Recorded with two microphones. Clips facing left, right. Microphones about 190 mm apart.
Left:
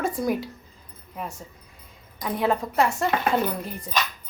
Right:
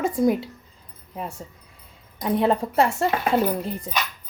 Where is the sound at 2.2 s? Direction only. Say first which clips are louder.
Right 3 dB; 30° right (ahead or behind).